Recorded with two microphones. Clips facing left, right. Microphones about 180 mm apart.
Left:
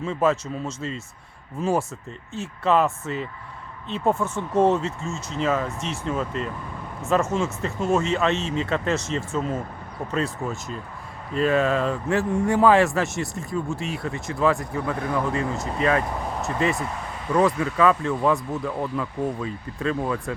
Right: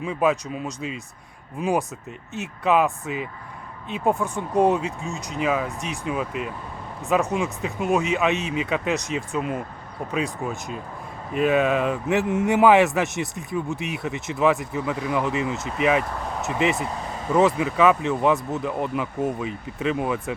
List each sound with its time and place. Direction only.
0.0 s a man's voice: 15° right (ahead or behind)